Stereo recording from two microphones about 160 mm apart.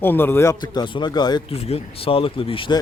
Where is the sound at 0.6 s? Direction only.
25° left (ahead or behind).